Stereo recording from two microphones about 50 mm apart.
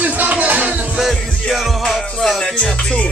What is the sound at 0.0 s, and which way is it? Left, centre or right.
Music, right.